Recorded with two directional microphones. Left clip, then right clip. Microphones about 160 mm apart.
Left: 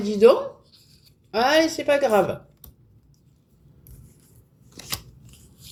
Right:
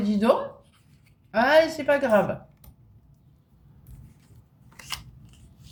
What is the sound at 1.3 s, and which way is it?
Speech, 35° left (ahead or behind).